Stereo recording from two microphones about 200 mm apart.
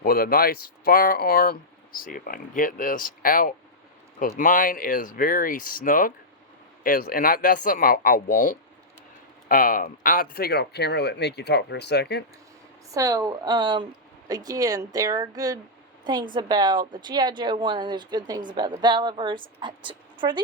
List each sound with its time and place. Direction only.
0.0 s speech: 50° left (ahead or behind)
12.9 s speech: 15° right (ahead or behind)